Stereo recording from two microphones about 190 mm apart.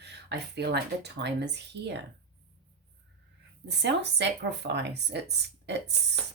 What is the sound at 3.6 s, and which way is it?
Speech, 65° right (ahead or behind).